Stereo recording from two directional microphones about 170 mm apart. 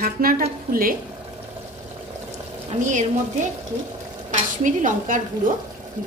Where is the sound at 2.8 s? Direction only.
45° right (ahead or behind).